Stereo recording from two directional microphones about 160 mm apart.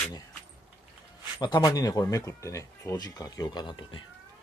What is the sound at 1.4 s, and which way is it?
Speech, 25° left (ahead or behind).